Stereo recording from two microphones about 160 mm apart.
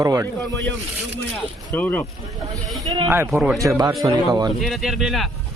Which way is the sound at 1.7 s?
10° left (ahead or behind).